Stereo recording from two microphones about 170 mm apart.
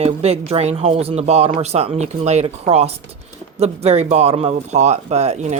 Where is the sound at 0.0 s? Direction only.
40° right (ahead or behind).